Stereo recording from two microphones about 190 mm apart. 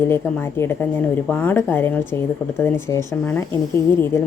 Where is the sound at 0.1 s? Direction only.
10° left (ahead or behind).